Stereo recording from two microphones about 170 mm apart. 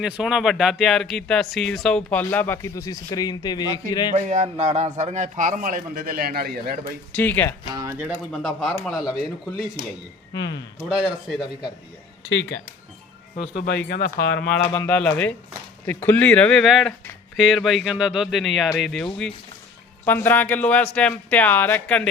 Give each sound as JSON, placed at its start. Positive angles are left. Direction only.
{"t": 0.0, "sound": "speech", "side_deg": -5}
{"t": 4.1, "sound": "a man's voice", "side_deg": -45}
{"t": 7.1, "sound": "speech", "side_deg": 10}
{"t": 7.7, "sound": "speech", "side_deg": -20}
{"t": 7.9, "sound": "speech", "side_deg": -10}
{"t": 10.3, "sound": "speech", "side_deg": 90}
{"t": 10.8, "sound": "speech", "side_deg": -5}
{"t": 12.3, "sound": "speech", "side_deg": 90}
{"t": 13.3, "sound": "speech", "side_deg": 40}
{"t": 14.4, "sound": "speech", "side_deg": 5}